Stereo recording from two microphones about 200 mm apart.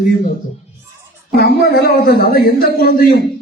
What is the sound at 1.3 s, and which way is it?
A man's voice, 55° left (ahead or behind).